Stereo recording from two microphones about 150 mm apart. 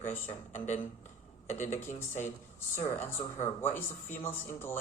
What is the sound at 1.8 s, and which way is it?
Speech, 15° left (ahead or behind).